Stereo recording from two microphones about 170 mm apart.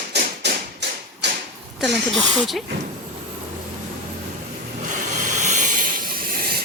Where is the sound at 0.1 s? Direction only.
85° right.